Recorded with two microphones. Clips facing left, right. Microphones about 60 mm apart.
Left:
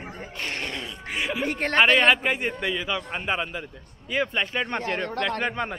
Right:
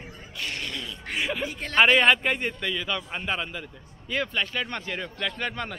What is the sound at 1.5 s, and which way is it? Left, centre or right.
Speech, left.